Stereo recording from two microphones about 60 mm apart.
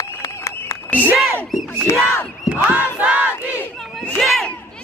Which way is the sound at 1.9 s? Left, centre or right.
Left.